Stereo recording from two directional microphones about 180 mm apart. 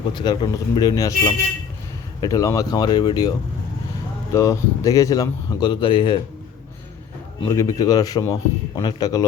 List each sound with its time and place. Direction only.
0.1 s speech: 25° left (ahead or behind)
7.4 s speech: 15° left (ahead or behind)